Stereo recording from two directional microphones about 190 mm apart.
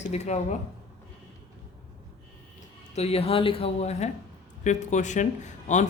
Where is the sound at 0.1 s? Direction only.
35° left (ahead or behind).